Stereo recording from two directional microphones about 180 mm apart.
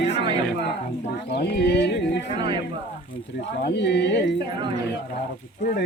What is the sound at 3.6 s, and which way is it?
Music, 70° left (ahead or behind).